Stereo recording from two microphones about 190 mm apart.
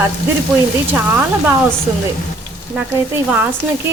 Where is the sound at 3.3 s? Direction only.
10° right (ahead or behind).